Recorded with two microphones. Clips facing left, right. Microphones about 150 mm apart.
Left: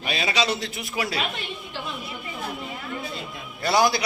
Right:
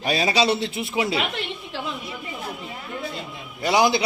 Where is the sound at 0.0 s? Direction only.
40° right (ahead or behind).